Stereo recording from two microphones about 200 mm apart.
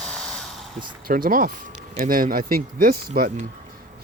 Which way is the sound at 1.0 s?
45° right (ahead or behind).